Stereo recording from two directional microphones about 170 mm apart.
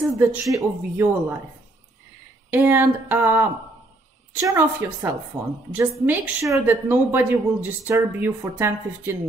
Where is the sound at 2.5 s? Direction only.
10° right (ahead or behind).